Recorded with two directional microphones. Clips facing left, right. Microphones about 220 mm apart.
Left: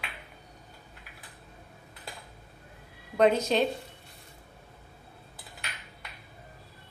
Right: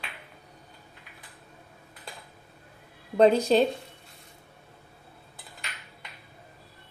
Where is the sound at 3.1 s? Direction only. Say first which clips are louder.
Right 4 dB; 30° right (ahead or behind).